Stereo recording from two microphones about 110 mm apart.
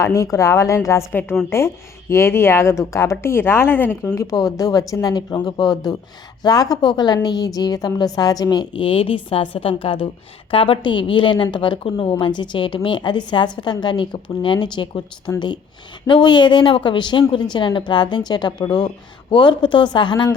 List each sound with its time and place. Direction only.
0.0 s speech: 30° left (ahead or behind)
4.1 s a woman's voice: 30° left (ahead or behind); by 15.0 s 45° left (ahead or behind)
16.0 s a woman's voice: 45° left (ahead or behind)